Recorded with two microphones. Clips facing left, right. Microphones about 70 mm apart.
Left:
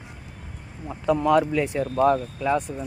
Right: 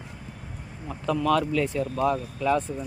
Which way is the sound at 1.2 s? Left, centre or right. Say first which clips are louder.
Left 2 dB; left.